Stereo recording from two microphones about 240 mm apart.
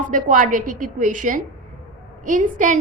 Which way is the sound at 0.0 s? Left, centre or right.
Right.